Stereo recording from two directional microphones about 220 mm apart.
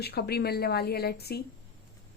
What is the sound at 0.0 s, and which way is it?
A woman's voice, 45° left (ahead or behind).